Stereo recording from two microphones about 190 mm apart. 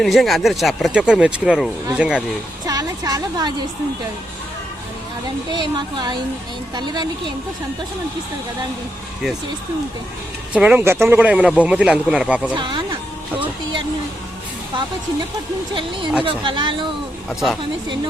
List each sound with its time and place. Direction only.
0.0 s speech: centre (ahead or behind)
2.6 s speech: 20° right (ahead or behind)
5.5 s speech: 20° right (ahead or behind)
10.5 s speech: 5° right (ahead or behind)
12.5 s speech: 25° right (ahead or behind)
16.2 s speech: 25° right (ahead or behind)
17.2 s speech: centre (ahead or behind)